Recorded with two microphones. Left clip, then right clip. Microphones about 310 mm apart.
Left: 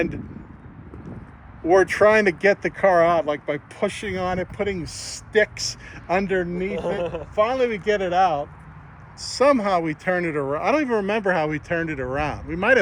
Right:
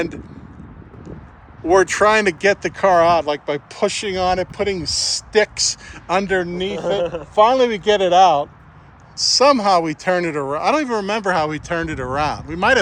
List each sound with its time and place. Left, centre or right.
1.6 s speech: centre
7.0 s speech: right
7.3 s speech: centre
9.2 s speech: centre